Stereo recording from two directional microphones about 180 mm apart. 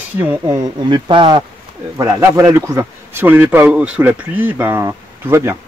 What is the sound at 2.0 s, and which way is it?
A man's voice, 15° right (ahead or behind).